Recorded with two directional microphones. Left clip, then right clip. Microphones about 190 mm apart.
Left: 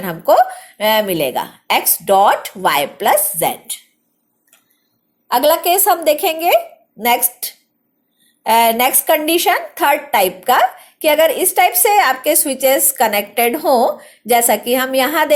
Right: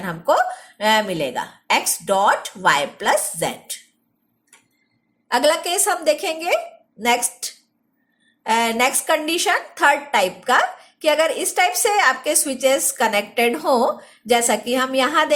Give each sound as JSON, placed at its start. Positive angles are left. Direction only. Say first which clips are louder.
{"t": 0.0, "sound": "a woman's voice", "louder": "left 6 dB", "side_deg": 20}
{"t": 5.3, "sound": "a woman's voice", "louder": "left 5 dB", "side_deg": 15}